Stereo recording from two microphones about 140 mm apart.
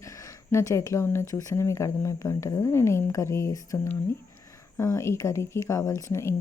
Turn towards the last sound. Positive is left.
turn(degrees=20)  # may be behind; listen again after turning